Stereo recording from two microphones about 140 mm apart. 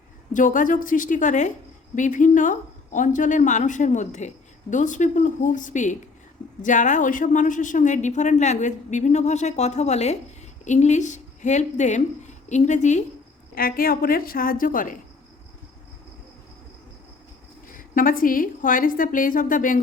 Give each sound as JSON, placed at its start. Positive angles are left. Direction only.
{"t": 0.3, "sound": "a woman's voice", "side_deg": 70}
{"t": 13.6, "sound": "a woman's voice", "side_deg": 90}
{"t": 17.7, "sound": "a woman's voice", "side_deg": 80}